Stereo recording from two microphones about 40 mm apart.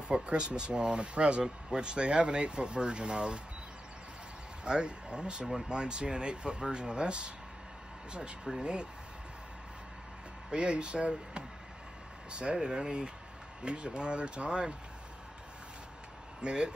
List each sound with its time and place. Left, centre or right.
0.1 s speech: right
4.6 s speech: right
8.5 s speech: right
10.5 s speech: right
16.3 s speech: right